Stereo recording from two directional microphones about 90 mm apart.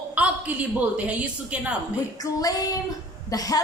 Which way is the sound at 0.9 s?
15° right (ahead or behind).